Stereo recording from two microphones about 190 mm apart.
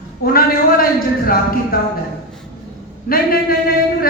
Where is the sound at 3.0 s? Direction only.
50° left (ahead or behind).